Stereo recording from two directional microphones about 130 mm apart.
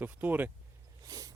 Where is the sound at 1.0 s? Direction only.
30° right (ahead or behind).